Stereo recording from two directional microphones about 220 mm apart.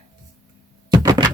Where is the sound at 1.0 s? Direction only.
20° right (ahead or behind).